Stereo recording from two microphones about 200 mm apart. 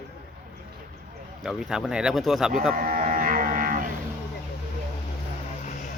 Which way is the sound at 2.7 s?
45° right (ahead or behind).